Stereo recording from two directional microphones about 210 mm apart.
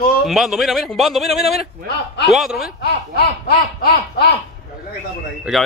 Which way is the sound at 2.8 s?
50° left (ahead or behind).